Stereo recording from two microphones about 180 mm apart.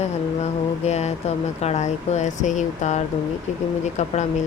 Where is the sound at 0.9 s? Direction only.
40° left (ahead or behind).